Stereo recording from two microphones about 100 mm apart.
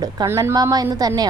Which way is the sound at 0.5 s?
40° right (ahead or behind).